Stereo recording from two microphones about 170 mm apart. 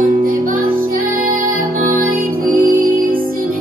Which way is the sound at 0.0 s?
55° right (ahead or behind).